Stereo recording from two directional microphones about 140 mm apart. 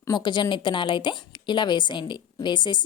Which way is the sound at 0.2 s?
35° left (ahead or behind).